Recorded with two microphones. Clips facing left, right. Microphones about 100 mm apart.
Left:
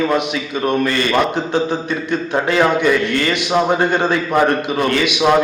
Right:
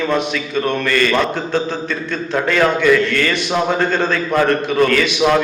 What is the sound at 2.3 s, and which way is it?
A man's voice, 20° left (ahead or behind).